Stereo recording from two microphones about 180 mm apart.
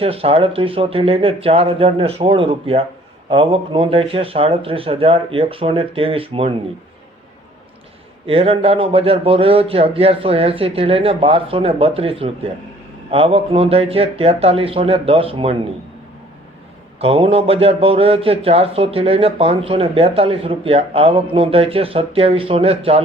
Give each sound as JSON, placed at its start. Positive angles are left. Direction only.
{"t": 0.0, "sound": "a man's voice", "side_deg": -30}
{"t": 8.3, "sound": "a man's voice", "side_deg": -30}
{"t": 17.0, "sound": "a man's voice", "side_deg": -30}